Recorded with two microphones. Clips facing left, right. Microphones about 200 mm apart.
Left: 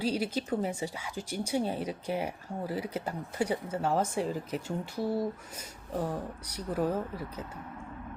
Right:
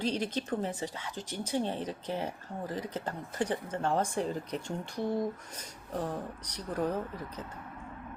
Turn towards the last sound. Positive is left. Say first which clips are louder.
# left 2 dB
turn(degrees=10)  # may be behind; listen again after turning